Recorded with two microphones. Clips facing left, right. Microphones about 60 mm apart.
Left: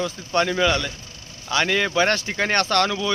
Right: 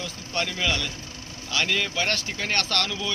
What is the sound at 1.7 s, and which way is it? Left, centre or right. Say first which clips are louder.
Speech: left 5 dB; left.